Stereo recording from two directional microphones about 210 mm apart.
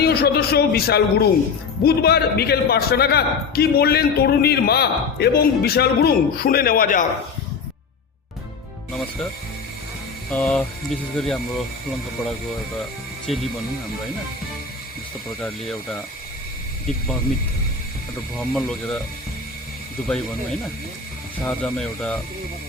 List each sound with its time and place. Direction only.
0.0 s a man's voice: 50° left (ahead or behind)
10.3 s speech: 5° left (ahead or behind)
13.2 s speech: centre (ahead or behind)
15.4 s speech: centre (ahead or behind)
18.3 s speech: centre (ahead or behind)
21.4 s speech: 5° left (ahead or behind)